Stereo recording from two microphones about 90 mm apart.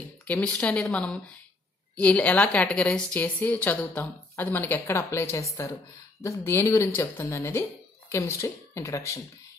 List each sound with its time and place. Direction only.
0.3 s a woman's voice: 15° left (ahead or behind); by 9.2 s 35° left (ahead or behind)